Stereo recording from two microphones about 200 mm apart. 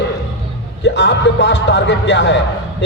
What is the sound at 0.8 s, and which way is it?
A man's voice, 60° left (ahead or behind).